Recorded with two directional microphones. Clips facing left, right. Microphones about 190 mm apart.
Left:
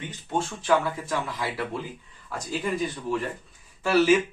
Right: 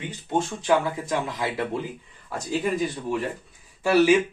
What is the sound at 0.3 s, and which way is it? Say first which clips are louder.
Speech: right 2 dB; 15° right (ahead or behind).